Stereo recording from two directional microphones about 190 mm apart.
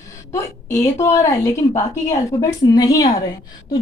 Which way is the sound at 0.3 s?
15° left (ahead or behind).